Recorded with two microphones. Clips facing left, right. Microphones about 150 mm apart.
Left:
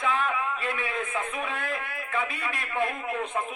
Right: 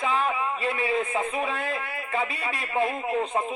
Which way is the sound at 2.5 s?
35° right (ahead or behind).